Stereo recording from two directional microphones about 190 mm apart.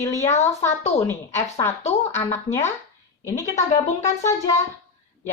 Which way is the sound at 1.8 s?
35° left (ahead or behind).